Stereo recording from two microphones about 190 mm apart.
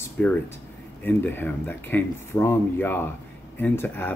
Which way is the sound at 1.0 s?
10° left (ahead or behind).